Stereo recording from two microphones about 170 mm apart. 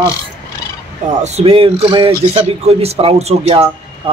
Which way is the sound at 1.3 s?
35° right (ahead or behind).